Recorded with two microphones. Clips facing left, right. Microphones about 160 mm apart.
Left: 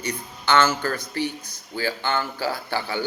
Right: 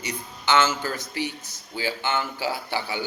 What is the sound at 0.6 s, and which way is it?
Speech, 50° left (ahead or behind).